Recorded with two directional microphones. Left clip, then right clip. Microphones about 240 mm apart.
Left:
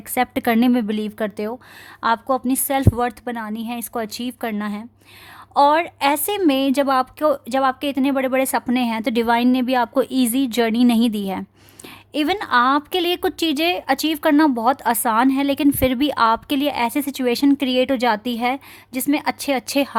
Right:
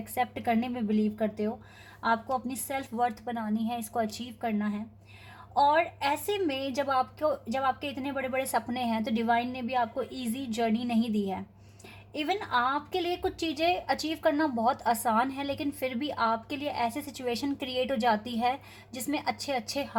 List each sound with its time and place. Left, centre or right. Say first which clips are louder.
0.1 s speech: left 10 dB; left
2.5 s speech: left 14 dB; left
12.1 s a woman's voice: left 11 dB; left